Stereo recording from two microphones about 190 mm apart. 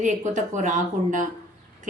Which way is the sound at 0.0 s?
40° right (ahead or behind).